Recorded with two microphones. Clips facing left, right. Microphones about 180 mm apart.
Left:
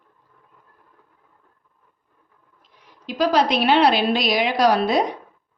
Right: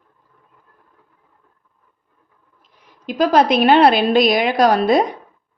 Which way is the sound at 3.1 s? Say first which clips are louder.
Right 4 dB; 50° right (ahead or behind).